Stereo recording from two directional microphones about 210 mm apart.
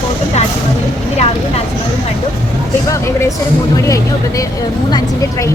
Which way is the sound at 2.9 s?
15° left (ahead or behind).